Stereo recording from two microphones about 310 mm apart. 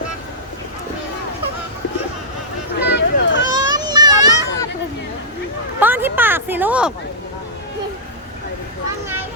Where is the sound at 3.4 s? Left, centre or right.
Centre.